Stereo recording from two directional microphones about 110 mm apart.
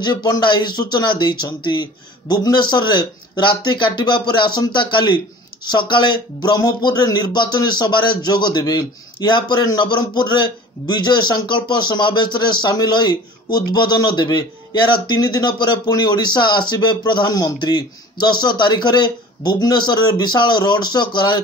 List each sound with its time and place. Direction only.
0.0 s speech: 40° left (ahead or behind)